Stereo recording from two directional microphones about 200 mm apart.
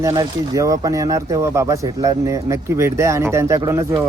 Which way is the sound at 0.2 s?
15° right (ahead or behind).